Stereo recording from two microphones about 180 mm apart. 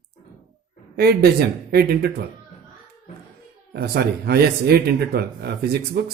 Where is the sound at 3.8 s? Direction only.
60° right (ahead or behind).